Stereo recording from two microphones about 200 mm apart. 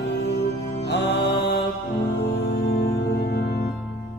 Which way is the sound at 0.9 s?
60° left (ahead or behind).